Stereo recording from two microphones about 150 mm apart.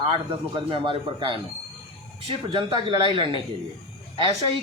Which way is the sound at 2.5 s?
30° right (ahead or behind).